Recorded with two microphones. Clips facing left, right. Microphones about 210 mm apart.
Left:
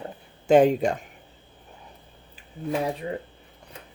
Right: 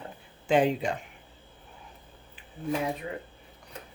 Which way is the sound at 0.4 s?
45° left (ahead or behind).